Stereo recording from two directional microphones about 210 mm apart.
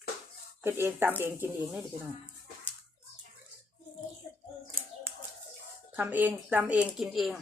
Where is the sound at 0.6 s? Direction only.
10° right (ahead or behind).